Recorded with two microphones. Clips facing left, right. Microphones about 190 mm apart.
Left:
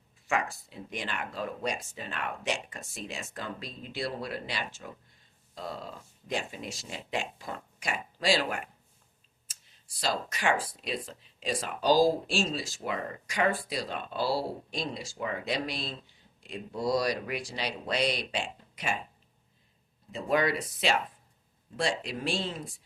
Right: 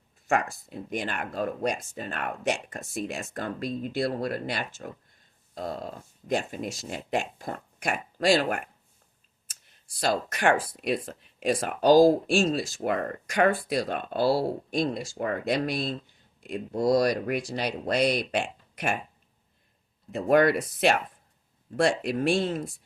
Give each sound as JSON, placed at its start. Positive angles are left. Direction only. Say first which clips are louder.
{"t": 0.3, "sound": "speech", "louder": "right 4 dB", "side_deg": -50}
{"t": 20.1, "sound": "speech", "louder": "right 7 dB", "side_deg": -55}